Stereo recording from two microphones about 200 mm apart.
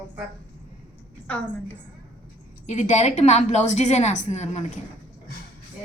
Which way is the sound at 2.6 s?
35° left (ahead or behind).